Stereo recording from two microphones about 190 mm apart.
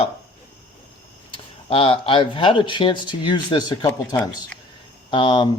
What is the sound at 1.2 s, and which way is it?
Speech, 30° left (ahead or behind).